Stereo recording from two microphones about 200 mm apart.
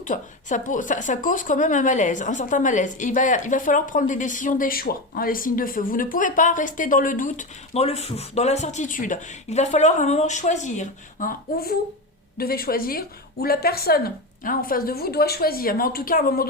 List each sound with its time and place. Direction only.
0.0 s a woman's voice: 40° left (ahead or behind)